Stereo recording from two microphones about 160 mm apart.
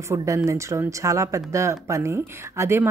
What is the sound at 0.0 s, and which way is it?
A woman's voice, 20° right (ahead or behind).